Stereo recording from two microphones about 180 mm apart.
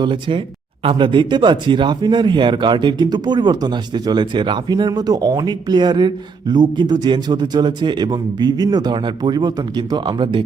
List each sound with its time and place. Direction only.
0.0 s speech: 25° right (ahead or behind)